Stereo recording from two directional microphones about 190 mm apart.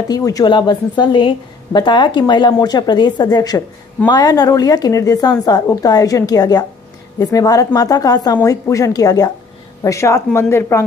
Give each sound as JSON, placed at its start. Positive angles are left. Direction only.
{"t": 0.1, "sound": "a woman's voice", "side_deg": 20}